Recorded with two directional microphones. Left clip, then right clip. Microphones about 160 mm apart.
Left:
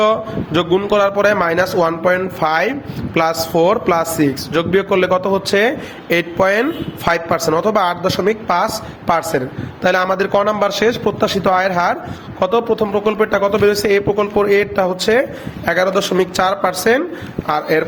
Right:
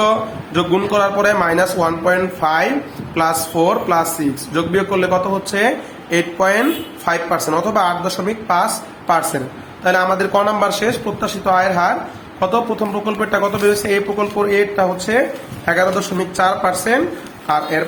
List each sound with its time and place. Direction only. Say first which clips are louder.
0.0 s speech: left 1 dB; 50° left (ahead or behind)
12.4 s a woman's voice: left 2 dB; 45° left (ahead or behind)